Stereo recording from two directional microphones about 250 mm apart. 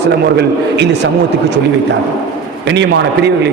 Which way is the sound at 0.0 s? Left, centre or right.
Right.